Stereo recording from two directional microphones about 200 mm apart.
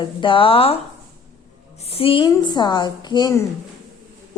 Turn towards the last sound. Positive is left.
turn(degrees=15)  # may be behind; listen again after turning